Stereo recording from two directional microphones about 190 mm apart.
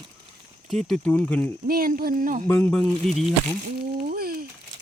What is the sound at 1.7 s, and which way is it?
Speech, 50° right (ahead or behind).